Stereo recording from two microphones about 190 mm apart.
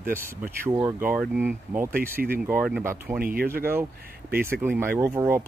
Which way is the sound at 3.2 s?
50° right (ahead or behind).